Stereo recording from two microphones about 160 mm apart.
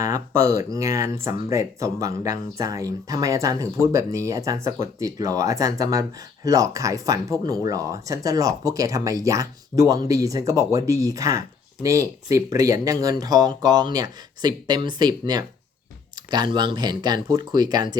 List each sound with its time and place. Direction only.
0.0 s speech: 20° right (ahead or behind)